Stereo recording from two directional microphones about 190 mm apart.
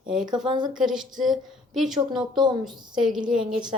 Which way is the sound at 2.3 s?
25° right (ahead or behind).